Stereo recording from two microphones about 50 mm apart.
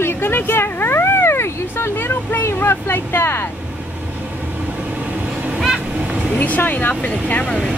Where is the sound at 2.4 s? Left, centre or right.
Left.